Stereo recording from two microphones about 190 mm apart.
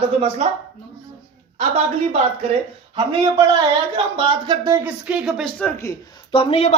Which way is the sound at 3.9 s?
25° right (ahead or behind).